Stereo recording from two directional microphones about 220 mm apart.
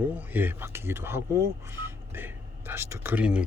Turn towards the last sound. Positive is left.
turn(degrees=-5)  # may be behind; listen again after turning